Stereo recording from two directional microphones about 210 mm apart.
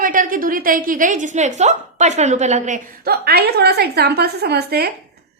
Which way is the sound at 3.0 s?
50° right (ahead or behind).